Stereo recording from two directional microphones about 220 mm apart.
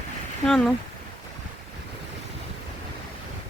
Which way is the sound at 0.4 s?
5° left (ahead or behind).